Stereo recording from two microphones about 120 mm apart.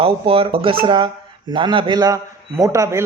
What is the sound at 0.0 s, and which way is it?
A man's voice, 50° right (ahead or behind).